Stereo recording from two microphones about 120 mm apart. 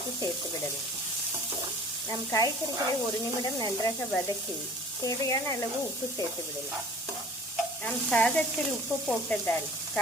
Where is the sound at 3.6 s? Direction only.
35° left (ahead or behind).